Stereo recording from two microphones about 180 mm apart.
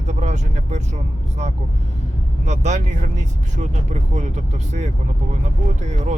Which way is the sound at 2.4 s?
40° right (ahead or behind).